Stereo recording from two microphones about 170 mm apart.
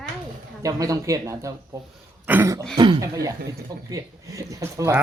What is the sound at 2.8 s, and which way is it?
Speech, 30° right (ahead or behind).